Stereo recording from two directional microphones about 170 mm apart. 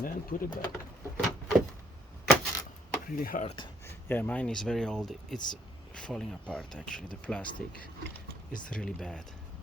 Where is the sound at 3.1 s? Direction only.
55° left (ahead or behind).